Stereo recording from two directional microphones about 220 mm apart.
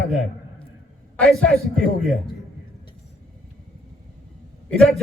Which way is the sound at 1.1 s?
Centre (ahead or behind).